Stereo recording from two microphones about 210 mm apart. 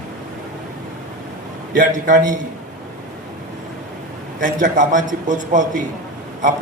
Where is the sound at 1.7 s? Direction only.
40° right (ahead or behind).